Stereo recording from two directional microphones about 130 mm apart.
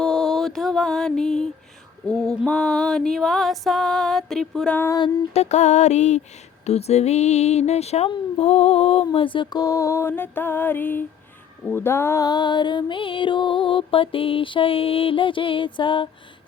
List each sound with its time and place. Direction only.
0.0 s mantra: 5° left (ahead or behind)
2.0 s a sound: 5° left (ahead or behind)
4.9 s music: 35° left (ahead or behind)
5.3 s speech: 60° left (ahead or behind)
8.4 s music: 50° left (ahead or behind)